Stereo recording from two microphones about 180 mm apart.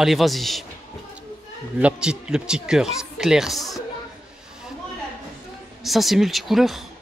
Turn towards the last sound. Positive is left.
turn(degrees=0)  # may be behind; listen again after turning